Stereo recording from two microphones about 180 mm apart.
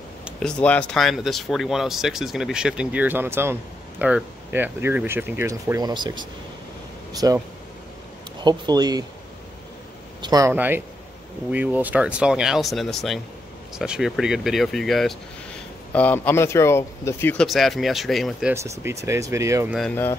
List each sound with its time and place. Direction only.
0.2 s speech: 5° left (ahead or behind); by 7.3 s 20° right (ahead or behind)
8.5 s speech: 25° right (ahead or behind)
10.2 s speech: 20° right (ahead or behind)
10.5 s speech: 10° right (ahead or behind); by 17.5 s 10° left (ahead or behind)
17.5 s speech: centre (ahead or behind)
18.5 s speech: 15° right (ahead or behind)
19.7 s speech: 5° left (ahead or behind)